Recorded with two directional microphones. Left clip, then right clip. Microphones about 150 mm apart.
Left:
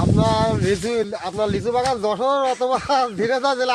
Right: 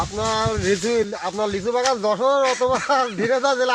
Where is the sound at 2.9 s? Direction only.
40° left (ahead or behind).